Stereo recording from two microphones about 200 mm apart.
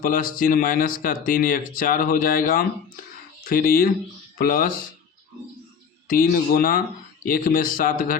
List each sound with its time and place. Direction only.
0.0 s speech: 45° left (ahead or behind)
6.1 s speech: 45° left (ahead or behind)